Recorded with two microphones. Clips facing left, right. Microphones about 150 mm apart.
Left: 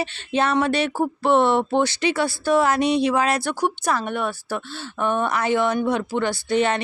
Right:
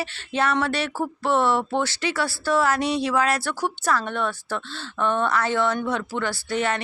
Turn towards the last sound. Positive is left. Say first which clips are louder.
# left 4 dB
turn(degrees=20)  # may be behind; listen again after turning